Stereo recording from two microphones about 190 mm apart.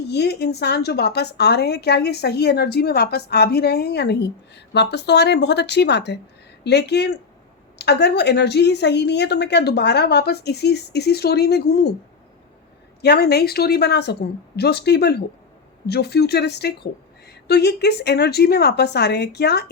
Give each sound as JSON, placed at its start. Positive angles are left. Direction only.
{"t": 0.1, "sound": "a woman's voice", "side_deg": 60}
{"t": 13.0, "sound": "a woman's voice", "side_deg": 60}